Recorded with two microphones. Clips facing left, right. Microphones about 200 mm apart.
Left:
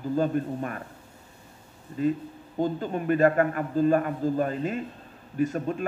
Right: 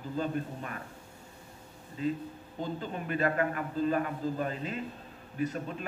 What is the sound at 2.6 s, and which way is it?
A man's voice, 45° left (ahead or behind).